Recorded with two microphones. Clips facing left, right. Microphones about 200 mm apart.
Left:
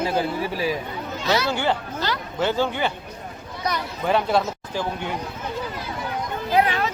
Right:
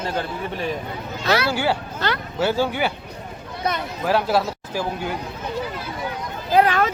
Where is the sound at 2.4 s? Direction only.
10° right (ahead or behind).